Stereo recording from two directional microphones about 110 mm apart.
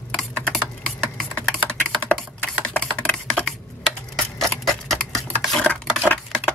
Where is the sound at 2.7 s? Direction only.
5° left (ahead or behind).